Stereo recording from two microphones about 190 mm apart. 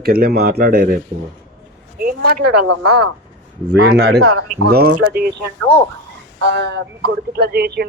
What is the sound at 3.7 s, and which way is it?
Speech, 60° right (ahead or behind).